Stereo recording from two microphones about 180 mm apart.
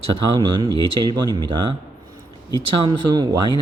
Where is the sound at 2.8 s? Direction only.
25° right (ahead or behind).